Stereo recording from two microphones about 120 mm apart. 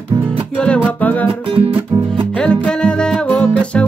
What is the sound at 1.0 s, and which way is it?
Music, 15° left (ahead or behind).